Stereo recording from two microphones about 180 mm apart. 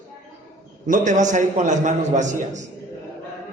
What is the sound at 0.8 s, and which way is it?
A man's voice, 45° right (ahead or behind).